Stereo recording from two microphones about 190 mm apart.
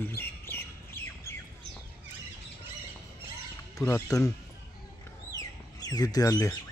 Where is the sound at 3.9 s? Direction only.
15° left (ahead or behind).